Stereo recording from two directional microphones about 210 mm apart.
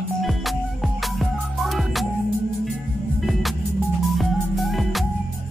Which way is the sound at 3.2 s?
Centre (ahead or behind).